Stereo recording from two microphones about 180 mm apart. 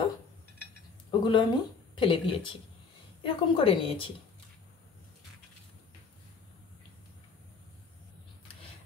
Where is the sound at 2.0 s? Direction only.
25° left (ahead or behind).